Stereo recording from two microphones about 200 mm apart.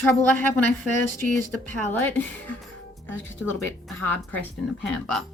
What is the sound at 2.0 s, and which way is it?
Speech, 10° left (ahead or behind).